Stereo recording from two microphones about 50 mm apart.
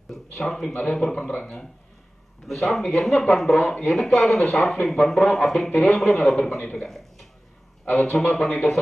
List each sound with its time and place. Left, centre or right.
0.1 s speech: centre
2.4 s a man's voice: centre